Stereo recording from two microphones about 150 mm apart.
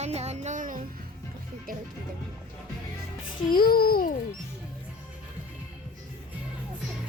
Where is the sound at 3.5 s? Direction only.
75° left (ahead or behind).